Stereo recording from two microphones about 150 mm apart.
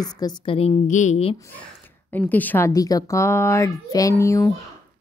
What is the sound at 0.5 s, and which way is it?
Speech, 40° left (ahead or behind).